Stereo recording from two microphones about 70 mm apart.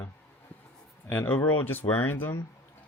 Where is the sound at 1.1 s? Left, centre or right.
Left.